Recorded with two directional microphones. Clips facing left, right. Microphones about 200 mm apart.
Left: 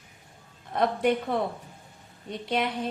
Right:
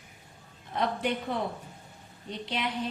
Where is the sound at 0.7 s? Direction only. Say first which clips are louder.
Left 5 dB; 55° left (ahead or behind).